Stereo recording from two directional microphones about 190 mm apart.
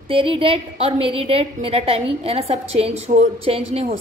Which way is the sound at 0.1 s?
30° right (ahead or behind).